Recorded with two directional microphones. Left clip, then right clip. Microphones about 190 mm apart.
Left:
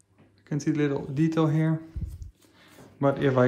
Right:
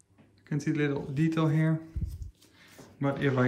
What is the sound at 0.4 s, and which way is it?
Speech, 10° left (ahead or behind).